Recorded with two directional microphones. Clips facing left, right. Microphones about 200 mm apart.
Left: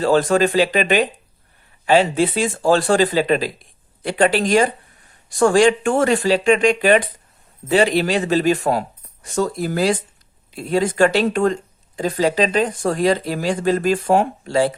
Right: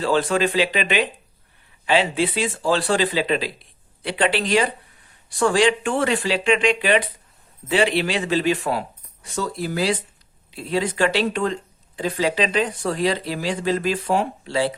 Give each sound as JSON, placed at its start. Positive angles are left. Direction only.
{"t": 0.0, "sound": "speech", "side_deg": 45}